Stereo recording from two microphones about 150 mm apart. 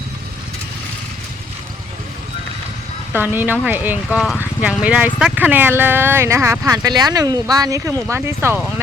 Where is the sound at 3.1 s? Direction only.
15° right (ahead or behind).